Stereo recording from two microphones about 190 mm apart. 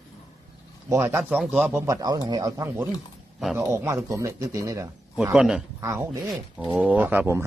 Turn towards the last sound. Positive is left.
turn(degrees=-10)  # may be behind; listen again after turning